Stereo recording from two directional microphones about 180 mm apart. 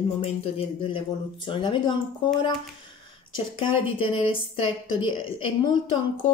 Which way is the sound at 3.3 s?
30° left (ahead or behind).